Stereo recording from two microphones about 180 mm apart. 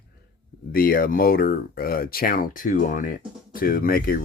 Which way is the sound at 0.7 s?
55° left (ahead or behind).